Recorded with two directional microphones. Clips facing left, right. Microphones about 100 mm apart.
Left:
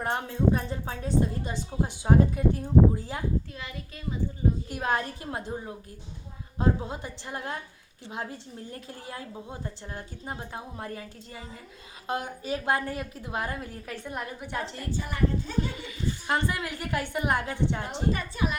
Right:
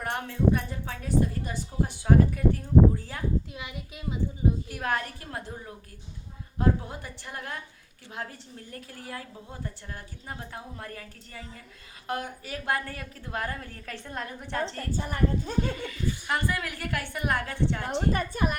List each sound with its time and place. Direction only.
0.0 s a woman's voice: 25° left (ahead or behind)
3.5 s a child's voice: 15° right (ahead or behind)
4.7 s a woman's voice: 20° left (ahead or behind)
14.9 s speech: 50° right (ahead or behind)
15.9 s a woman's voice: 25° left (ahead or behind)
18.1 s speech: 50° right (ahead or behind)